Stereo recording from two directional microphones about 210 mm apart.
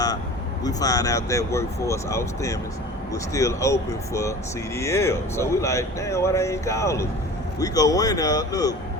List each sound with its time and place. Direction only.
0.6 s speech: 15° left (ahead or behind)